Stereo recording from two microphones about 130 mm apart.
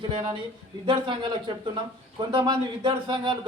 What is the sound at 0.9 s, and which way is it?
Speech, 40° right (ahead or behind).